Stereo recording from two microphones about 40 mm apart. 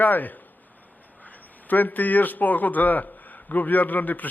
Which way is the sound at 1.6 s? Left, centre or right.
Left.